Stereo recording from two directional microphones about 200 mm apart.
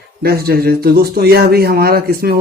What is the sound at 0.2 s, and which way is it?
Speech, 50° right (ahead or behind).